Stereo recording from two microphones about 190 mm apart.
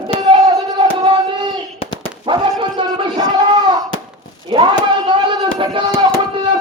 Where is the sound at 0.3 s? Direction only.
20° right (ahead or behind).